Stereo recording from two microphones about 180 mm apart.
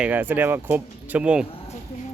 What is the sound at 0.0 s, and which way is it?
Speech, 10° right (ahead or behind).